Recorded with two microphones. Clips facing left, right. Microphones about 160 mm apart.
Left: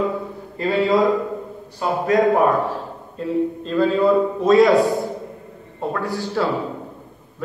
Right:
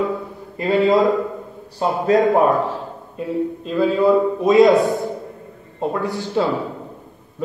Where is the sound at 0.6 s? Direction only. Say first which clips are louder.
Right 1 dB; 20° right (ahead or behind).